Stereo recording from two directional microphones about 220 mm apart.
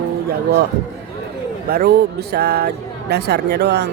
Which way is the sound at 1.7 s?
45° right (ahead or behind).